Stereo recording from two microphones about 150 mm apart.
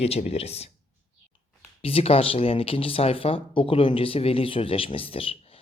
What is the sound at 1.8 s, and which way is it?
Speech, 40° left (ahead or behind).